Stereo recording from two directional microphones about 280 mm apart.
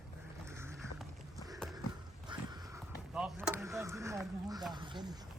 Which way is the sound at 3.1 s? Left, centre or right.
Centre.